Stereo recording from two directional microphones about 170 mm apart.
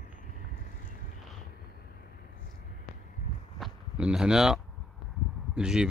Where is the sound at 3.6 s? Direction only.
5° right (ahead or behind).